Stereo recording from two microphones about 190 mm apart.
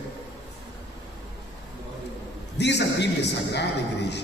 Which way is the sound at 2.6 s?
65° left (ahead or behind).